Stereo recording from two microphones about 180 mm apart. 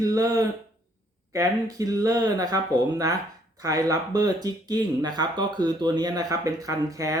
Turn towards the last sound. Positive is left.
turn(degrees=-20)  # may be behind; listen again after turning